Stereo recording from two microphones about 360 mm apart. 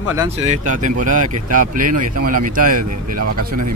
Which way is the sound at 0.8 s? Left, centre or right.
Right.